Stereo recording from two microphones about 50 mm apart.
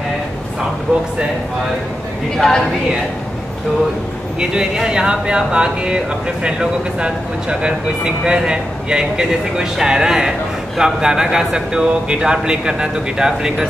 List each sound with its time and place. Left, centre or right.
2.3 s a woman's voice: centre
4.4 s speech: centre